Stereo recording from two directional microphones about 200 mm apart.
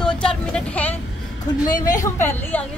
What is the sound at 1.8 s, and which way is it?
Speech, 40° left (ahead or behind).